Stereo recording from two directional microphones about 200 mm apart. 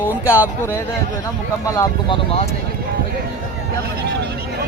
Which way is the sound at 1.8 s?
25° left (ahead or behind).